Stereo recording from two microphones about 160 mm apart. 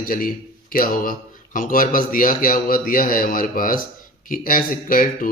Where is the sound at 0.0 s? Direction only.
65° left (ahead or behind).